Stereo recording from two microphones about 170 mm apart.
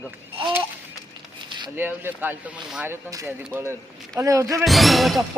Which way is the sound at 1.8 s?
10° right (ahead or behind).